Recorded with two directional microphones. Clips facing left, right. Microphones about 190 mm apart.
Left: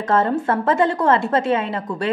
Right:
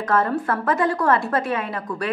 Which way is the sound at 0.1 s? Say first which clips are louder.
Left 3 dB; 25° left (ahead or behind).